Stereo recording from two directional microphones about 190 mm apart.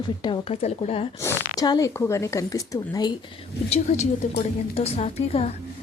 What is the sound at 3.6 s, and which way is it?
A woman's voice, 35° left (ahead or behind).